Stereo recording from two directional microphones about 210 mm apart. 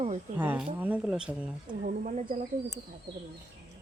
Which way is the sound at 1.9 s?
40° right (ahead or behind).